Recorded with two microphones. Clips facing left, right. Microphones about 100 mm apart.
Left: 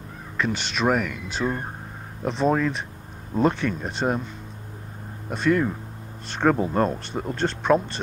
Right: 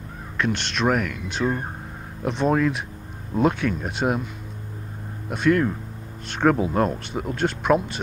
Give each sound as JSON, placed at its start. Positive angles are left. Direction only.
{"t": 0.4, "sound": "speech", "side_deg": 0}
{"t": 5.3, "sound": "speech", "side_deg": 0}